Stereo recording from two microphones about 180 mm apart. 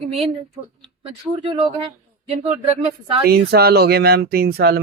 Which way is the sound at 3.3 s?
60° right (ahead or behind).